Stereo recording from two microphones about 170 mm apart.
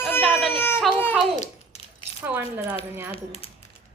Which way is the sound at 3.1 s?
35° left (ahead or behind).